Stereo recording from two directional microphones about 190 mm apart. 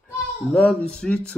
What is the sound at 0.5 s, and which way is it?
Speech, 5° left (ahead or behind).